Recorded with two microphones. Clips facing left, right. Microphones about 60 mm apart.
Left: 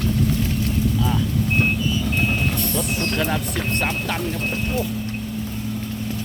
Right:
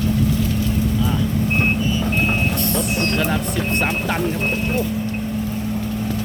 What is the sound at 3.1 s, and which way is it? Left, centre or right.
Speech, centre.